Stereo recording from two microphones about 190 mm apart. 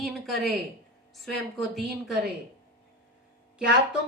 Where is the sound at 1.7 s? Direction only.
Centre (ahead or behind).